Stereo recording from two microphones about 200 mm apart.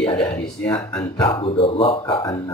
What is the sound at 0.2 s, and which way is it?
Speech, 10° left (ahead or behind).